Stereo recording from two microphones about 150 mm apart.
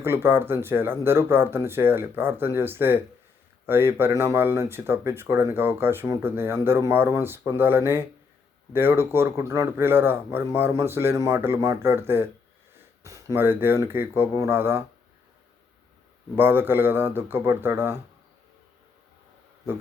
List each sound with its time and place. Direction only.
0.0 s speech: 15° right (ahead or behind)
16.3 s speech: 15° right (ahead or behind)